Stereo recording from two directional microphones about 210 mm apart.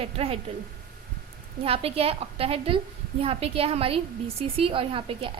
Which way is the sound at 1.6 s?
30° right (ahead or behind).